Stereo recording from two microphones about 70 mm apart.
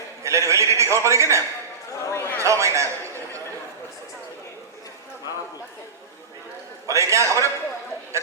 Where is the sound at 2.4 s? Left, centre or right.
Right.